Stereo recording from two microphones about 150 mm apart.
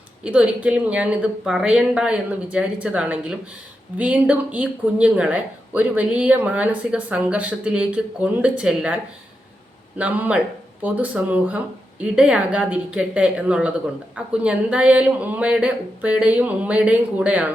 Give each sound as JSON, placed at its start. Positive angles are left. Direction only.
{"t": 0.3, "sound": "a woman's voice", "side_deg": -10}
{"t": 10.0, "sound": "a woman's voice", "side_deg": -10}